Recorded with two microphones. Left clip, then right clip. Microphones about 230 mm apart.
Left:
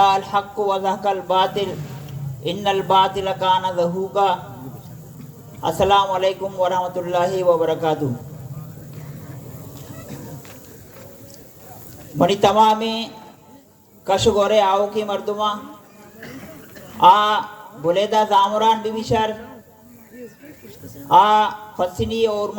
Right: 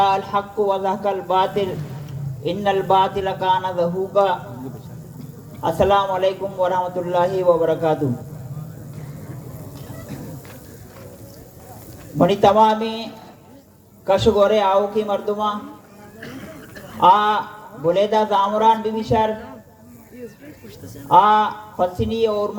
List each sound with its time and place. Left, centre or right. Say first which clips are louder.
0.0 s a man's voice: left 2 dB; left
5.6 s a man's voice: left 1 dB; left
12.1 s a man's voice: right 1 dB; left
14.1 s a man's voice: right 1 dB; left
17.0 s a man's voice: left 1 dB; left
21.1 s a man's voice: even; left